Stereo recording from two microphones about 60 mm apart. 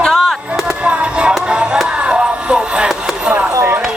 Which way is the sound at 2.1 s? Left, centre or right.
Centre.